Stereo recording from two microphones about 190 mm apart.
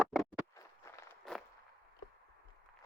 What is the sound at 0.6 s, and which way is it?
Walk, 15° left (ahead or behind).